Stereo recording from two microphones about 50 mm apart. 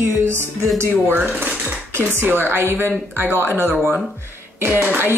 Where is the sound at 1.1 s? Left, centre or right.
Right.